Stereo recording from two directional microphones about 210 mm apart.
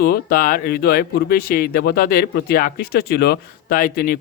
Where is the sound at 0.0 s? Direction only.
45° left (ahead or behind).